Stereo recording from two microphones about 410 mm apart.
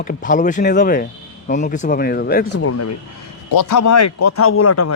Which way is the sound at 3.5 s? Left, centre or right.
Left.